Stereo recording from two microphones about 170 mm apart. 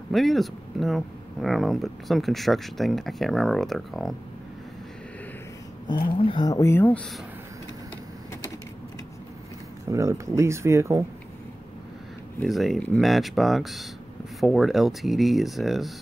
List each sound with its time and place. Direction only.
0.1 s speech: centre (ahead or behind)
6.0 s speech: 30° left (ahead or behind); by 7.0 s 15° left (ahead or behind)
9.8 s speech: 15° right (ahead or behind)
12.4 s speech: centre (ahead or behind)